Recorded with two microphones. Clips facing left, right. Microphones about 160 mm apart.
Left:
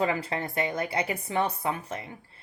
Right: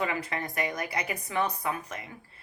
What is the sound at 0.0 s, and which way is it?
A woman's voice, 30° left (ahead or behind).